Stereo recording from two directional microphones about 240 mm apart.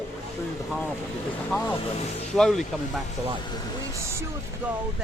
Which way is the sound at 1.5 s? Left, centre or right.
Centre.